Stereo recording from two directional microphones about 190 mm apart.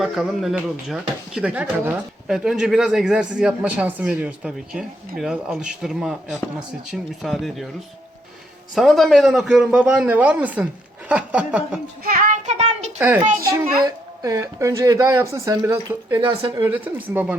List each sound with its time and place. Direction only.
0.0 s speech: centre (ahead or behind)
8.7 s speech: centre (ahead or behind)
12.0 s child singing: 45° right (ahead or behind)
13.0 s speech: 10° right (ahead or behind)